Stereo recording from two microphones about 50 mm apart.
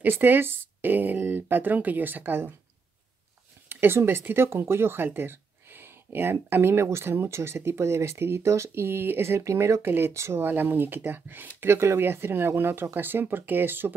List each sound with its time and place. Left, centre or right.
0.0 s speech: right
3.6 s speech: right
10.1 s speech: right
10.4 s speech: right
12.0 s speech: right